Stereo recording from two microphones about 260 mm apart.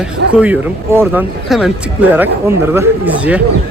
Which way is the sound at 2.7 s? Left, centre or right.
Centre.